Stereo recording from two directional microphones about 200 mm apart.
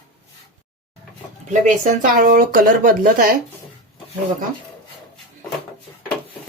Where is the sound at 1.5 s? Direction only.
40° right (ahead or behind).